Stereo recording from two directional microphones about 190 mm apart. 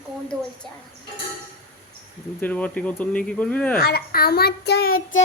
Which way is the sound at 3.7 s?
55° left (ahead or behind).